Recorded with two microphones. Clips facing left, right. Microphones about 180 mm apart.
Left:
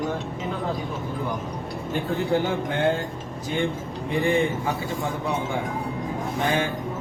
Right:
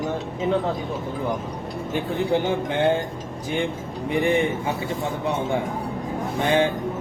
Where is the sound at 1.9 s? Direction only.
20° right (ahead or behind).